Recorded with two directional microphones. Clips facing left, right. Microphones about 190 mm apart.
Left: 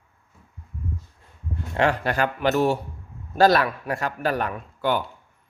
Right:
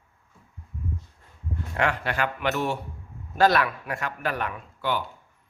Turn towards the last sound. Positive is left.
turn(degrees=45)  # may be behind; listen again after turning